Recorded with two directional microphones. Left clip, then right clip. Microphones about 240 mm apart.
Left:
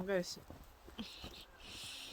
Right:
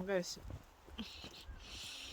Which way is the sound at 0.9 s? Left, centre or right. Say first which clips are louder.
Even; centre.